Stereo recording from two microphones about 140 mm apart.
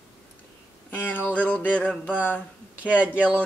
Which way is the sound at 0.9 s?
10° left (ahead or behind).